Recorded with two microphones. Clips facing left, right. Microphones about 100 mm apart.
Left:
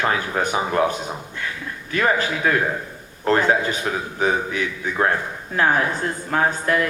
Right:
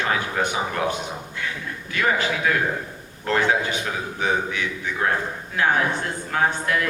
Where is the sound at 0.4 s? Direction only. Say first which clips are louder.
Left 4 dB; 40° left (ahead or behind).